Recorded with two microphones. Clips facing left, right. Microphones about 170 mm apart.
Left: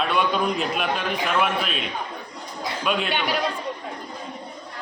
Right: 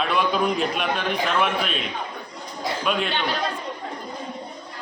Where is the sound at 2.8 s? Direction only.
Centre (ahead or behind).